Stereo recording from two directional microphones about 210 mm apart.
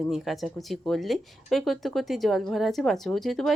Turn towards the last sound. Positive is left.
turn(degrees=0)  # may be behind; listen again after turning